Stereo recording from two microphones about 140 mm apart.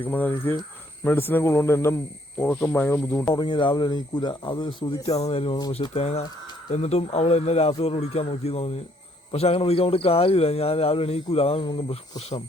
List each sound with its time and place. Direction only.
0.0 s speech: 10° left (ahead or behind)
3.3 s speech: 35° left (ahead or behind)
5.2 s a man's voice: 40° left (ahead or behind)